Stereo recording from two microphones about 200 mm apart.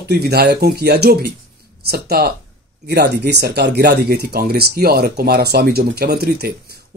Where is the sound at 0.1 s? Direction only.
55° right (ahead or behind).